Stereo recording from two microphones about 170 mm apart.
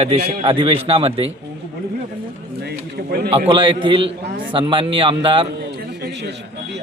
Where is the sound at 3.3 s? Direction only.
35° right (ahead or behind).